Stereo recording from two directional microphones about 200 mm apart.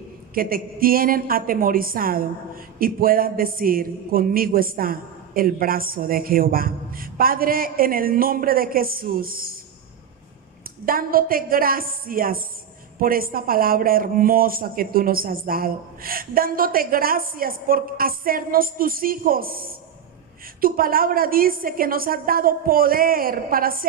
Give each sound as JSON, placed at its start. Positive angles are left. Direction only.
{"t": 0.3, "sound": "a woman's voice", "side_deg": -45}
{"t": 10.9, "sound": "a woman's voice", "side_deg": -45}